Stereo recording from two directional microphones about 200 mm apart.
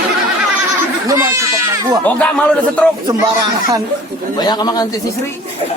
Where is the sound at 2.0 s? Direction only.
5° left (ahead or behind).